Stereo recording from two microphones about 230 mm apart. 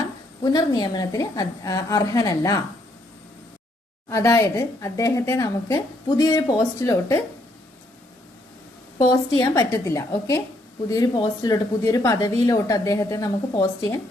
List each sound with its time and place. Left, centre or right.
0.4 s a woman's voice: centre
4.1 s a woman's voice: centre
9.0 s a woman's voice: centre